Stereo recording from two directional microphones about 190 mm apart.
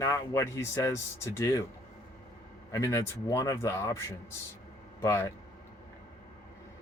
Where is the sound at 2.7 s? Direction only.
15° left (ahead or behind).